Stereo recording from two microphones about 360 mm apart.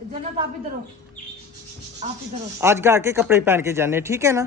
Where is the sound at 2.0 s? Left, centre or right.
Centre.